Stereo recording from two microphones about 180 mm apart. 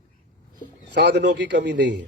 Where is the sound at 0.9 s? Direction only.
70° right (ahead or behind).